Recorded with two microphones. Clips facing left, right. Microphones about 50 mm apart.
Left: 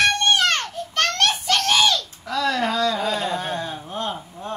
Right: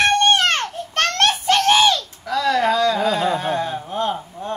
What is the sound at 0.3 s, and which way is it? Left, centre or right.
Baby cry, right.